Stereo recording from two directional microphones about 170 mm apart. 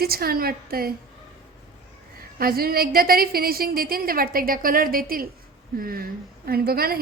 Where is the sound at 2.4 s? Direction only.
60° right (ahead or behind).